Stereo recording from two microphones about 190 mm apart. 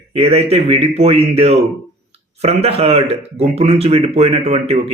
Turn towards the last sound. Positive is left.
turn(degrees=-35)  # may be behind; listen again after turning